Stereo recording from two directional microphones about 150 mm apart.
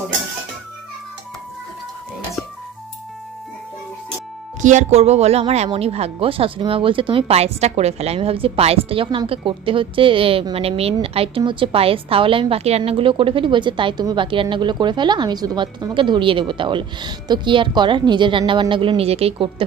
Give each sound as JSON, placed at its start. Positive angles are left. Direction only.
{"t": 4.6, "sound": "speech", "side_deg": -55}